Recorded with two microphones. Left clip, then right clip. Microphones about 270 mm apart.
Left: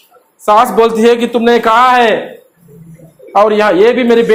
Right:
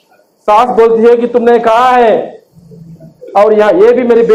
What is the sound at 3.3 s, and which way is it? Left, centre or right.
A man's voice, left.